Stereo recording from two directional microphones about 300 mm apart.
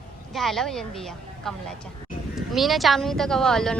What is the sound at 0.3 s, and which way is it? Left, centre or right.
Speech, centre.